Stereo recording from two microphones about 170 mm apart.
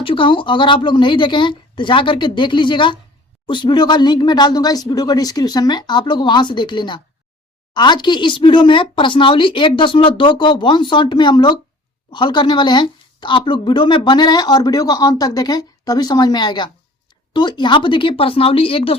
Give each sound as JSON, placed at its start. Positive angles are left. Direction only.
{"t": 0.0, "sound": "speech", "side_deg": 30}